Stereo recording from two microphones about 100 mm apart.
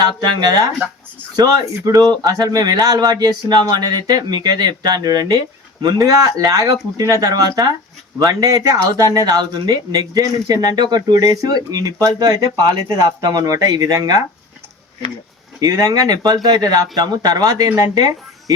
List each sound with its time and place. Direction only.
0.0 s speech: 45° right (ahead or behind)
15.6 s speech: 40° right (ahead or behind)